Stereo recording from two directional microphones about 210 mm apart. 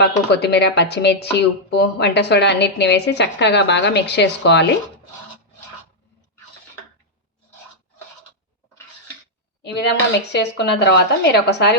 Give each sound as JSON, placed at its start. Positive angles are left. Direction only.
{"t": 0.0, "sound": "speech", "side_deg": 50}
{"t": 9.8, "sound": "speech", "side_deg": 55}